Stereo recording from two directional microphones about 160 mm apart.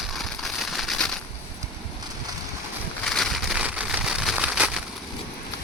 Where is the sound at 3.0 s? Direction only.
Centre (ahead or behind).